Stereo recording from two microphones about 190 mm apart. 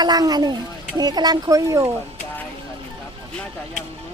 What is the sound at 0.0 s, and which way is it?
Speech, 20° right (ahead or behind).